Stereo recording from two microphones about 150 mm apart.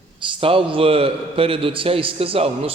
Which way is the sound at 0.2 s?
35° right (ahead or behind).